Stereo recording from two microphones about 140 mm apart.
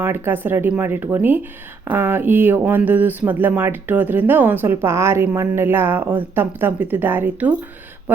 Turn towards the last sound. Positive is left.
turn(degrees=-15)  # may be behind; listen again after turning